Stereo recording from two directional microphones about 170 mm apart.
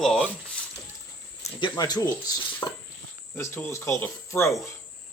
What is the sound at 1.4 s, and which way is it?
Speech, 30° left (ahead or behind).